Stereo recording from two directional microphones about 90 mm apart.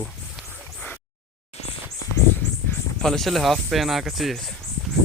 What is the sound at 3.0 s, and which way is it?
Speech, 5° left (ahead or behind).